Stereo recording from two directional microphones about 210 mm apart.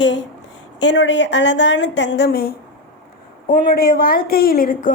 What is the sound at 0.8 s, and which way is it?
A woman's voice, 55° left (ahead or behind).